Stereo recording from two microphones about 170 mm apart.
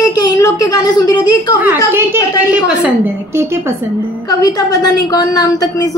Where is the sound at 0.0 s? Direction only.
20° left (ahead or behind).